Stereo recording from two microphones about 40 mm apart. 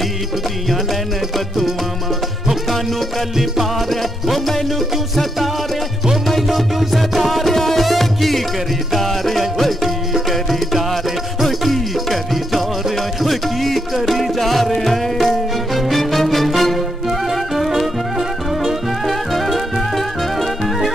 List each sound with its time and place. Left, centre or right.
3.9 s music: centre
11.4 s music: centre
19.0 s music: centre